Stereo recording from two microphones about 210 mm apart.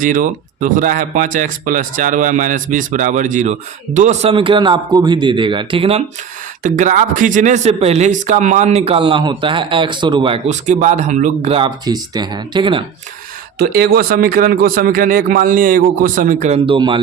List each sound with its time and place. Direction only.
0.0 s speech: 40° right (ahead or behind)
6.6 s speech: 35° right (ahead or behind)
13.6 s speech: 45° right (ahead or behind); by 17.0 s 25° right (ahead or behind)